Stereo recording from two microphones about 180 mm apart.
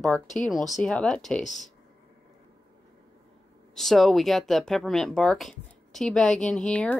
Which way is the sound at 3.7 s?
Centre (ahead or behind).